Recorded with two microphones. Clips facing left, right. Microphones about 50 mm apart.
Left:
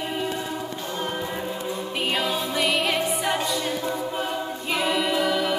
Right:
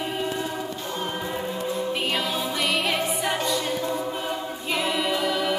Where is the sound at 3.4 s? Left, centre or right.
Centre.